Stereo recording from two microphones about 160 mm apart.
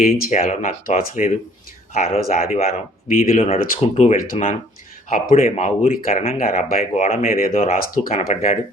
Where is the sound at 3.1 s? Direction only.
60° left (ahead or behind).